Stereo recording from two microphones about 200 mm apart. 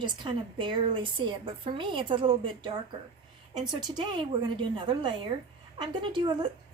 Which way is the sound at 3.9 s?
20° right (ahead or behind).